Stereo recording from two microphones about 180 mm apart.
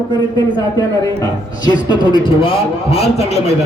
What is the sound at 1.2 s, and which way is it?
A man's voice, 25° left (ahead or behind).